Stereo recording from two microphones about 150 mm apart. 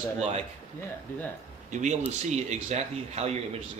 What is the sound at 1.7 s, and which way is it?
Speech, 55° right (ahead or behind).